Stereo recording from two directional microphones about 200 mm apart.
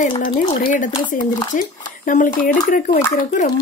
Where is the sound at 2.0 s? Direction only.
40° left (ahead or behind).